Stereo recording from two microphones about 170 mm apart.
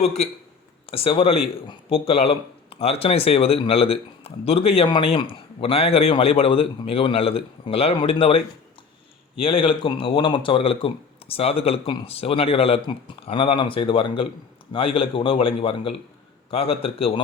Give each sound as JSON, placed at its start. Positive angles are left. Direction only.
{"t": 0.9, "sound": "speech", "side_deg": 35}
{"t": 9.4, "sound": "speech", "side_deg": 30}